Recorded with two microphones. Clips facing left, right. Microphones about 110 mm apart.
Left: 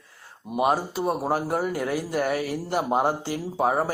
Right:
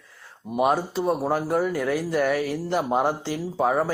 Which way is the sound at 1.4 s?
45° left (ahead or behind).